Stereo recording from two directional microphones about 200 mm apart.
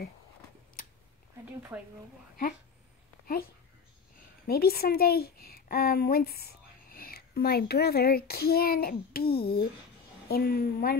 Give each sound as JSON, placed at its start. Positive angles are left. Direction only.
{"t": 1.7, "sound": "speech", "side_deg": -5}
{"t": 4.5, "sound": "a woman's voice", "side_deg": 50}